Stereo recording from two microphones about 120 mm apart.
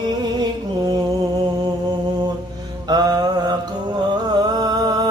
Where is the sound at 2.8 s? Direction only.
35° right (ahead or behind).